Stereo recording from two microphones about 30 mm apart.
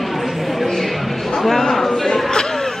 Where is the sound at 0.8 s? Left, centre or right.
Centre.